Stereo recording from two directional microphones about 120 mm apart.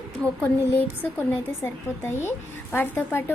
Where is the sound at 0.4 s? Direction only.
15° left (ahead or behind).